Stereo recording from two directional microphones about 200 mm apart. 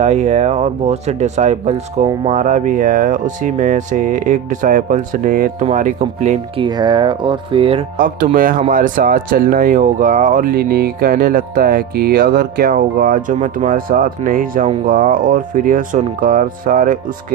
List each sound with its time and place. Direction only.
0.0 s speech: 35° right (ahead or behind)
6.7 s speech: 20° right (ahead or behind)
7.9 s speech: 45° right (ahead or behind)